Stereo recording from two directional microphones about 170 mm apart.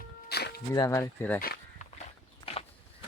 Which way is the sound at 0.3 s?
70° left (ahead or behind).